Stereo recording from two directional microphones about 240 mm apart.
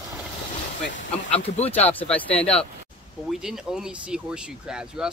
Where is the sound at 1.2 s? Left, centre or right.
Left.